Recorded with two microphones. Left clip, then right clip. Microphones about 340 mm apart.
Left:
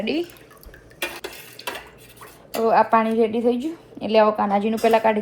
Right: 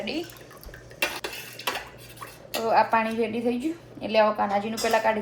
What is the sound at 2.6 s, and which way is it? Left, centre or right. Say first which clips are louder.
A woman's voice: left 5 dB; centre.